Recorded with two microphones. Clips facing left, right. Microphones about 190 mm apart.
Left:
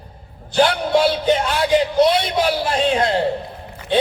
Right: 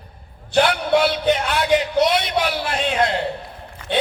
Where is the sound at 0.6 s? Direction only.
30° left (ahead or behind).